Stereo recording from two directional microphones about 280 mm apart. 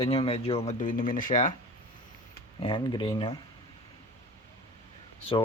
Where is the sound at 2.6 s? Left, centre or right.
Centre.